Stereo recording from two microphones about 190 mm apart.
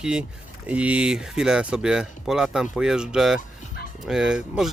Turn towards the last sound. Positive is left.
turn(degrees=-5)  # may be behind; listen again after turning